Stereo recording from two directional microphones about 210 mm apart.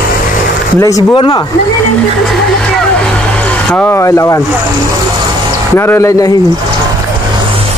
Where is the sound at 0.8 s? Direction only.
20° left (ahead or behind).